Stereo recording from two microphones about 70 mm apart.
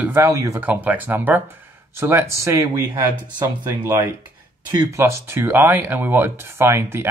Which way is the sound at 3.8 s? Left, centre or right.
Right.